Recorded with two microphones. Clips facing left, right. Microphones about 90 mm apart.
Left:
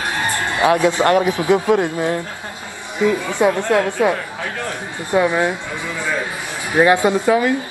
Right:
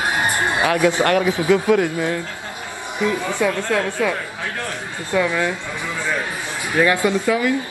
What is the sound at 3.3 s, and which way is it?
Speech, 20° left (ahead or behind).